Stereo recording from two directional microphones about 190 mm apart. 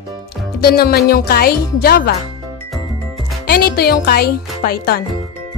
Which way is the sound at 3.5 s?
55° left (ahead or behind).